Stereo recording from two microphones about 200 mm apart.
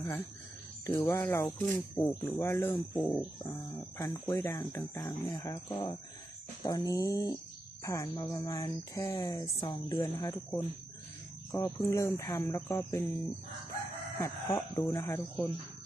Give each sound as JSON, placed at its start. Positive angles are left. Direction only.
{"t": 0.9, "sound": "speech", "side_deg": 15}
{"t": 14.2, "sound": "speech", "side_deg": 15}